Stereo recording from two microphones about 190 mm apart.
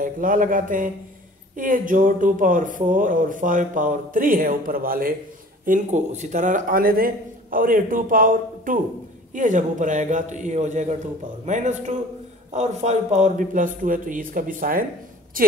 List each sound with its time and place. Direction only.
0.0 s a man's voice: 45° right (ahead or behind)